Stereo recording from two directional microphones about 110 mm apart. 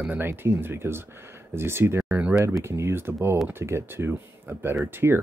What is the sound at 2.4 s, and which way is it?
Speech, 25° right (ahead or behind).